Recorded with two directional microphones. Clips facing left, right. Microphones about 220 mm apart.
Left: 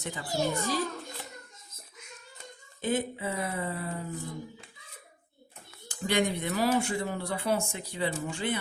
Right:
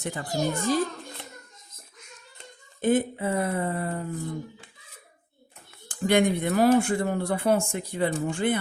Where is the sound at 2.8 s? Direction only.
50° right (ahead or behind).